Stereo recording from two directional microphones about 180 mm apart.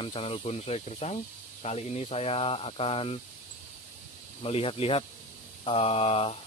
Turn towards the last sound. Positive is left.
turn(degrees=30)  # may be behind; listen again after turning